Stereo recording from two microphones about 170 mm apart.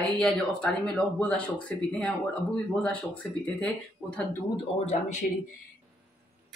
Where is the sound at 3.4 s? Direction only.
10° left (ahead or behind).